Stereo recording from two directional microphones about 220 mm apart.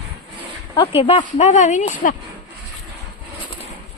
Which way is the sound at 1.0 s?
25° left (ahead or behind).